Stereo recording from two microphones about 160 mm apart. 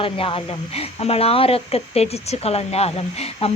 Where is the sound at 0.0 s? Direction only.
35° left (ahead or behind).